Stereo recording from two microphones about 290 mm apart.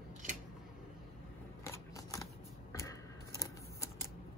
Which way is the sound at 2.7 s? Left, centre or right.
Centre.